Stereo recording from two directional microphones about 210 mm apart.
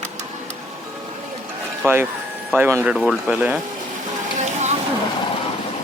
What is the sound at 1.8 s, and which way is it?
Speech, 10° right (ahead or behind).